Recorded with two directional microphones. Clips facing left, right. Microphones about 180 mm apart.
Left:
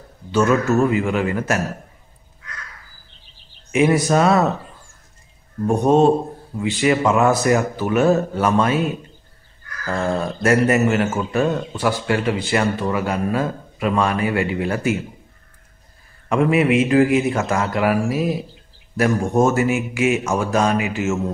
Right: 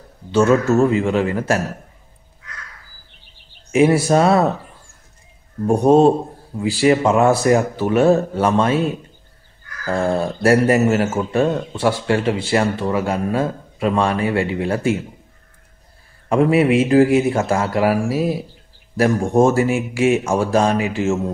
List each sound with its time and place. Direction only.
0.3 s speech: 30° right (ahead or behind)
3.7 s speech: 30° right (ahead or behind)
5.7 s a man's voice: 35° right (ahead or behind)
16.3 s a man's voice: 35° right (ahead or behind)